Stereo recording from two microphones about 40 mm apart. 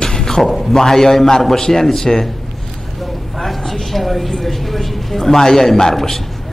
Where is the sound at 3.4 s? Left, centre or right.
Centre.